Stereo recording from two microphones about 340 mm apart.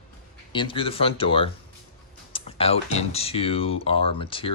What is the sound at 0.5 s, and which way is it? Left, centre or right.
Speech, centre.